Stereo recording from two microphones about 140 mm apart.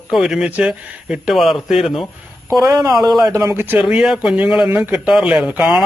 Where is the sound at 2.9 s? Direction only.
Centre (ahead or behind).